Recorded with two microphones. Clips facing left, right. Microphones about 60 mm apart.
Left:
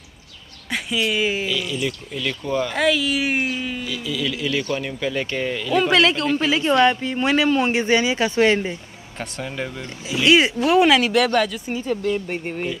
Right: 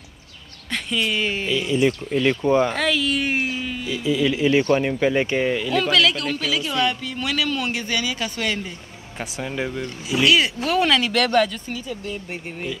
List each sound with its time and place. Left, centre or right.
0.7 s speech: centre
1.5 s speech: right
2.7 s speech: centre
3.8 s speech: right
5.8 s speech: left
9.2 s speech: centre
10.2 s speech: left
10.9 s speech: centre
11.2 s speech: centre
11.9 s speech: left